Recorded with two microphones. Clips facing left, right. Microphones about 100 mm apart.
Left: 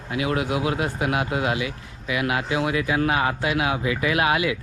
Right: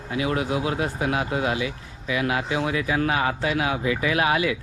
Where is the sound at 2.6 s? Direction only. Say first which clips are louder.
Left 1 dB; 35° left (ahead or behind).